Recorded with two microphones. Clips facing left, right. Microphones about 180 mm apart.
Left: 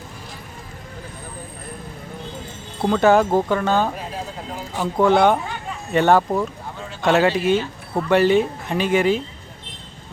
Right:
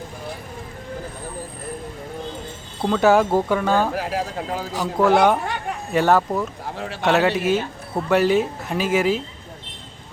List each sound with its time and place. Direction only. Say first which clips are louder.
2.9 s speech: left 1 dB; 5° right (ahead or behind)
3.9 s speech: right 6 dB; 75° right (ahead or behind)
4.9 s speech: left 1 dB; 5° right (ahead or behind)
5.4 s a sound: right 3 dB; 60° right (ahead or behind)
5.9 s speech: left 2 dB; 5° right (ahead or behind)
6.7 s bird: right 4 dB; 75° right (ahead or behind)
7.0 s speech: left 1 dB; centre (ahead or behind)